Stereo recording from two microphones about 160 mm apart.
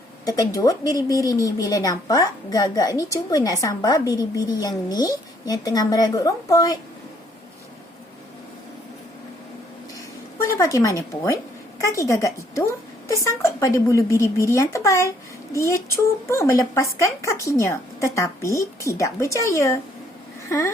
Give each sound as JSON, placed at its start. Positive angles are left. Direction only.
{"t": 0.3, "sound": "speech", "side_deg": 20}
{"t": 10.4, "sound": "a woman's voice", "side_deg": 20}